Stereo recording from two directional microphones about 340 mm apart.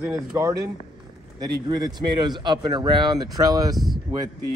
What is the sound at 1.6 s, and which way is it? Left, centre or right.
Speech, centre.